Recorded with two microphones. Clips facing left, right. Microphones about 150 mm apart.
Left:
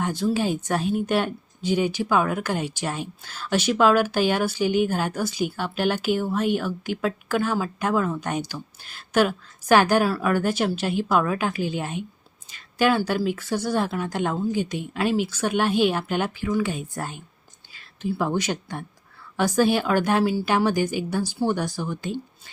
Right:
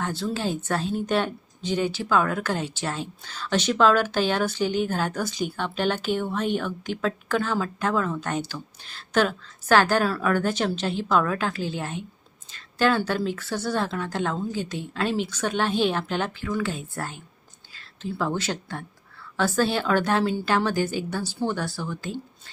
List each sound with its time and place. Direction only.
0.0 s speech: 15° left (ahead or behind)